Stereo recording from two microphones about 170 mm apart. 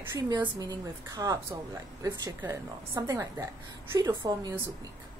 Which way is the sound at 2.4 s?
15° right (ahead or behind).